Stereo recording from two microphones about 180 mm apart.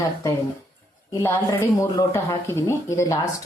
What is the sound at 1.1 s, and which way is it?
Speech, 15° left (ahead or behind).